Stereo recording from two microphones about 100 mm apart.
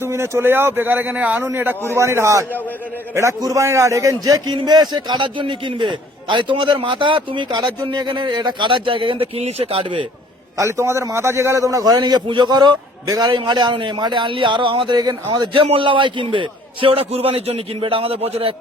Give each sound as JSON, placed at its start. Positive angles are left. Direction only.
{"t": 0.0, "sound": "a man's voice", "side_deg": -25}
{"t": 10.6, "sound": "a man's voice", "side_deg": -30}
{"t": 15.5, "sound": "a man's voice", "side_deg": -60}